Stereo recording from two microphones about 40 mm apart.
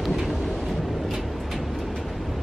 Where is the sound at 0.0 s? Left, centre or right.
Centre.